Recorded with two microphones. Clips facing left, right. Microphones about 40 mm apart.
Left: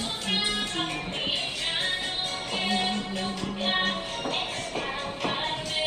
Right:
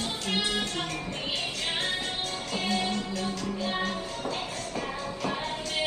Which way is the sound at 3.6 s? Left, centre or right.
Left.